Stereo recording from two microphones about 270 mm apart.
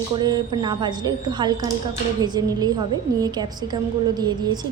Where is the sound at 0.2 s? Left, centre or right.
Centre.